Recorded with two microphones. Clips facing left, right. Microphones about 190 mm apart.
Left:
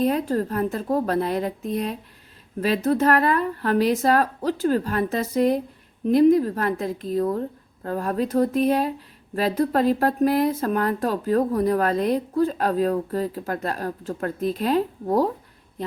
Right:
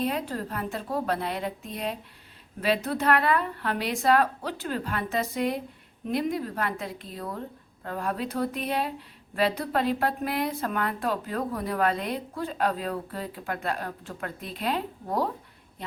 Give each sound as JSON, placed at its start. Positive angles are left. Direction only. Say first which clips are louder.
{"t": 0.0, "sound": "speech", "louder": "left 7 dB", "side_deg": 45}